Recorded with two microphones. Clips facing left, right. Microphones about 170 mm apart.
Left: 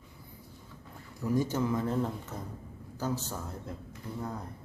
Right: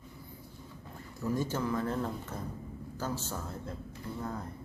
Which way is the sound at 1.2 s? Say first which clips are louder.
Left 3 dB; 15° left (ahead or behind).